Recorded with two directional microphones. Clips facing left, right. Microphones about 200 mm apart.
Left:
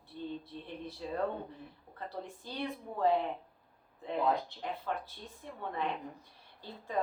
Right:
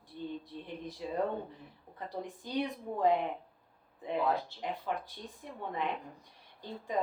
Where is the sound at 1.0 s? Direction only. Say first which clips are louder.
Right 1 dB; 15° right (ahead or behind).